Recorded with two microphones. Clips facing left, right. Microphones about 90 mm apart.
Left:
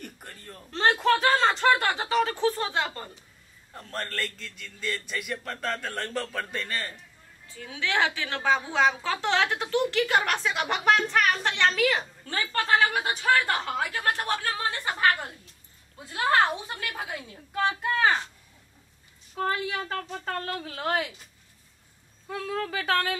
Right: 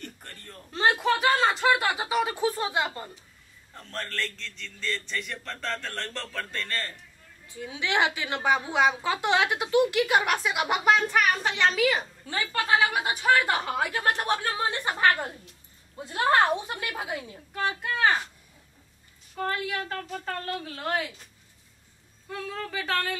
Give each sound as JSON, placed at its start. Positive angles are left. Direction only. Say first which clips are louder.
{"t": 0.0, "sound": "a sound", "louder": "even", "side_deg": 10}
{"t": 0.7, "sound": "a sound", "louder": "left 1 dB", "side_deg": -5}
{"t": 3.7, "sound": "a man's voice", "louder": "left 1 dB", "side_deg": 5}
{"t": 7.4, "sound": "a woman's voice", "louder": "right 1 dB", "side_deg": -15}
{"t": 17.6, "sound": "speech", "louder": "left 2 dB", "side_deg": 0}
{"t": 19.3, "sound": "speech", "louder": "left 1 dB", "side_deg": 5}
{"t": 22.3, "sound": "a man's voice", "louder": "left 3 dB", "side_deg": 10}